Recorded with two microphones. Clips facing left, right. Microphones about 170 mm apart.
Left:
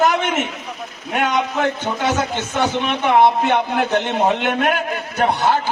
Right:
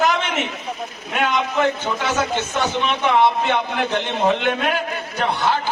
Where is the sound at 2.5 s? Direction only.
50° left (ahead or behind).